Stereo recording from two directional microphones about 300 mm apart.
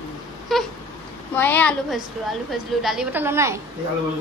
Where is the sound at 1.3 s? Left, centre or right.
Centre.